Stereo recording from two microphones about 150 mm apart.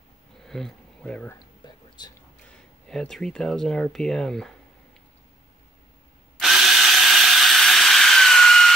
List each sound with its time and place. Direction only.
0.5 s speech: 5° left (ahead or behind)
2.0 s speech: 30° left (ahead or behind)
2.5 s speech: 5° left (ahead or behind)
6.3 s drill: centre (ahead or behind)